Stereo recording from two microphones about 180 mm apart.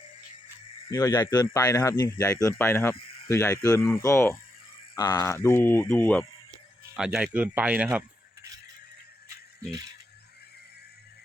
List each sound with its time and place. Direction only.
0.9 s a man's voice: 20° left (ahead or behind)
6.9 s speech: 5° right (ahead or behind)